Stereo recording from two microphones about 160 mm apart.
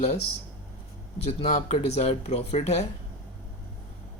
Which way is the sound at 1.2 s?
40° left (ahead or behind).